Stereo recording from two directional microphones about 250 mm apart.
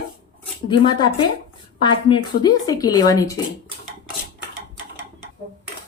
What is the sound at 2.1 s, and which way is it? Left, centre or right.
Speech, centre.